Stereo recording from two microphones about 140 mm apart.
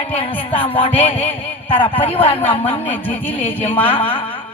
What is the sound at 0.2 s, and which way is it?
Speech, 40° left (ahead or behind).